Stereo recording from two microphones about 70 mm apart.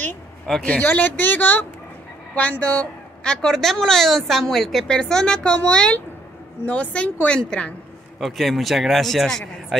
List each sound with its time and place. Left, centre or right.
0.7 s speech: left
3.4 s a woman's voice: centre
8.2 s a man's voice: centre